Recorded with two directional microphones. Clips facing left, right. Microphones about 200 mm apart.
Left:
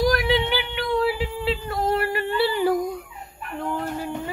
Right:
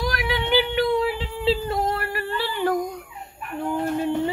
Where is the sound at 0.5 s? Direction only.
25° right (ahead or behind).